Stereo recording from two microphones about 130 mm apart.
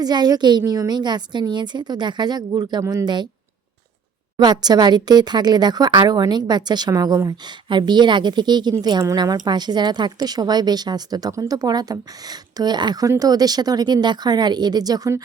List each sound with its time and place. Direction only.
0.0 s speech: 30° right (ahead or behind)
4.4 s speech: 35° right (ahead or behind)